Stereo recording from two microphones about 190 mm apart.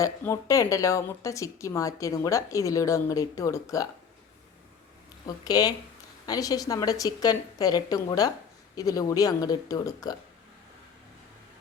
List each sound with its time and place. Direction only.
0.0 s speech: 15° left (ahead or behind)
5.2 s a woman's voice: 20° left (ahead or behind)